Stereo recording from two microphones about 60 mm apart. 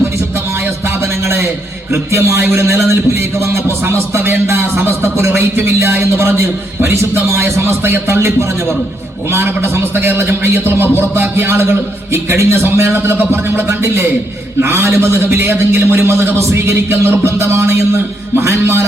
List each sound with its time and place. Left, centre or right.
1.9 s a man's voice: right